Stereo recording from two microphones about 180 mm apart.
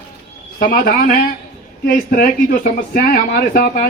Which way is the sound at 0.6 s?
55° left (ahead or behind).